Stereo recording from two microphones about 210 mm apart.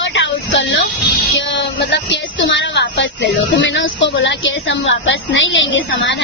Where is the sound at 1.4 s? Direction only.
60° left (ahead or behind).